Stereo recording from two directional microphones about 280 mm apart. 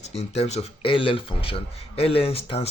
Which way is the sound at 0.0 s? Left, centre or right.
Left.